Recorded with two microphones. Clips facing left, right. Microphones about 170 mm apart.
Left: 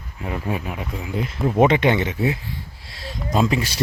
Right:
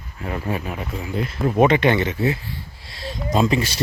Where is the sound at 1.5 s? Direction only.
20° left (ahead or behind).